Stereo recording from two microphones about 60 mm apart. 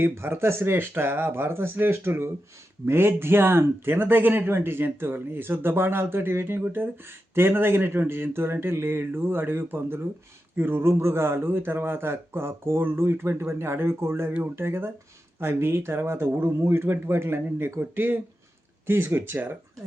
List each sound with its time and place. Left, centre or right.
0.0 s a man's voice: right